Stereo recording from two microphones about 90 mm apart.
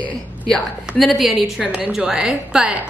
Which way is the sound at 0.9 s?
Centre (ahead or behind).